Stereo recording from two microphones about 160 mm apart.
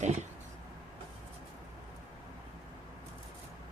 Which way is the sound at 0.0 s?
45° right (ahead or behind).